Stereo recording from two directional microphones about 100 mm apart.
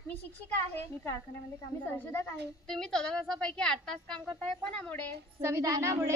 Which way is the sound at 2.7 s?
5° left (ahead or behind).